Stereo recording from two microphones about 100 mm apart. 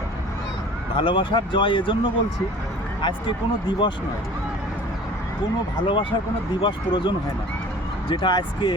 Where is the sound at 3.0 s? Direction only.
55° left (ahead or behind).